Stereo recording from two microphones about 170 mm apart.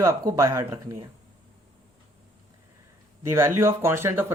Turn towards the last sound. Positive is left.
turn(degrees=-15)  # may be behind; listen again after turning